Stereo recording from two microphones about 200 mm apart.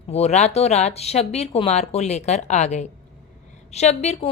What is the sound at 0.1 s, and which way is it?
A woman's voice, 35° left (ahead or behind).